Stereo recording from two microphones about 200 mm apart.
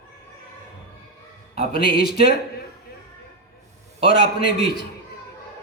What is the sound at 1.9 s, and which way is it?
Speech, 50° left (ahead or behind).